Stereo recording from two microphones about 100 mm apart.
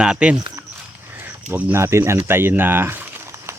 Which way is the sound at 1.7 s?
25° right (ahead or behind).